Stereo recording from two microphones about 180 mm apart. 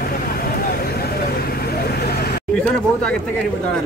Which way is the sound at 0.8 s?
60° left (ahead or behind).